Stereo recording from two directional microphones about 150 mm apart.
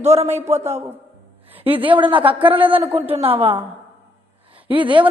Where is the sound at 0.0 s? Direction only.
45° right (ahead or behind).